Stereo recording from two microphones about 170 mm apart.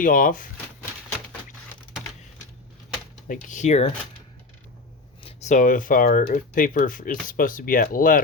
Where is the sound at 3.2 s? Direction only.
50° left (ahead or behind).